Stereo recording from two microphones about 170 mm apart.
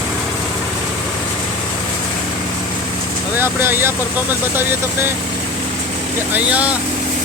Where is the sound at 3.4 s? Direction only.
10° right (ahead or behind).